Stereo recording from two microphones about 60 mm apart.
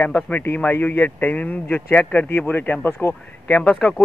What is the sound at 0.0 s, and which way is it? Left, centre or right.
A man's voice, left.